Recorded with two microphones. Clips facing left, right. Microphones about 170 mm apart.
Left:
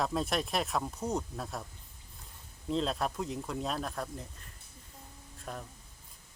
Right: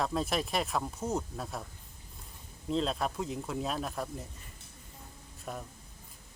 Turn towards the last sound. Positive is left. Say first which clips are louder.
# right 1 dB
turn(degrees=-5)  # may be behind; listen again after turning